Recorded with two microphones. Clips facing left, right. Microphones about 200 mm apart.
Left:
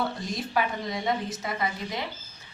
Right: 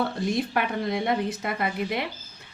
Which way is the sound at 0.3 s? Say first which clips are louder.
Right 3 dB; 60° right (ahead or behind).